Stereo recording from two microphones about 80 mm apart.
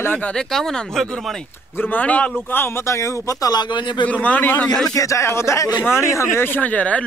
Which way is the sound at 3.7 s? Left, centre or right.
Left.